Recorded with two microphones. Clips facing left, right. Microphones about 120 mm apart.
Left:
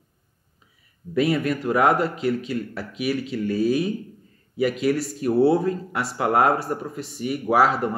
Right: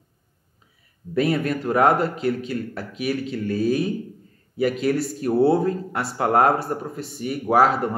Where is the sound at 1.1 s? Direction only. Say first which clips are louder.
Even; 45° right (ahead or behind).